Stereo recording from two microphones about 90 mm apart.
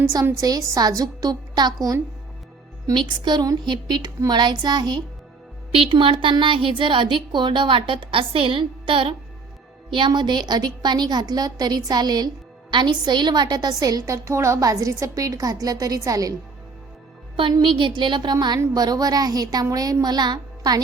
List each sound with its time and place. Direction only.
0.0 s a woman's voice: 40° right (ahead or behind)
2.9 s a woman's voice: 60° right (ahead or behind)
5.7 s a woman's voice: 80° right
9.9 s a woman's voice: 60° right (ahead or behind); by 16.3 s 40° right (ahead or behind)
17.6 s a woman's voice: 65° right (ahead or behind); by 20.8 s 50° right (ahead or behind)